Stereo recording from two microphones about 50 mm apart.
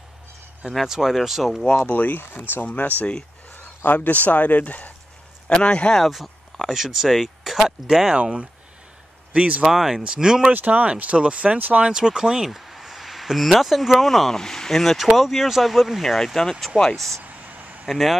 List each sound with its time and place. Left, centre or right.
0.8 s speech: centre
1.9 s speech: left
5.5 s speech: left
5.9 s speech: centre
9.3 s speech: right
9.7 s speech: centre
10.0 s speech: centre
10.5 s speech: right
11.8 s speech: centre
12.4 s speech: centre
17.2 s vehicle: right
17.8 s speech: centre